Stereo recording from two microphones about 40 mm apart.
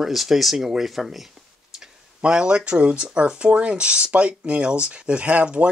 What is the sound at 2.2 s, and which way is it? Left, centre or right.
Speech, right.